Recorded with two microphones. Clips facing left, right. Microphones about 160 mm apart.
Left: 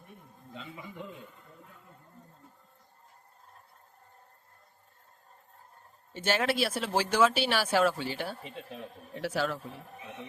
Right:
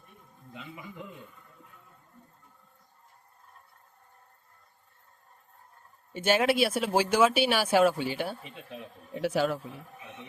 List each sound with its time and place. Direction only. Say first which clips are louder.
6.1 s speech: right 4 dB; 15° right (ahead or behind)
8.4 s speech: left 3 dB; 35° left (ahead or behind)
9.1 s speech: right 4 dB; 15° right (ahead or behind)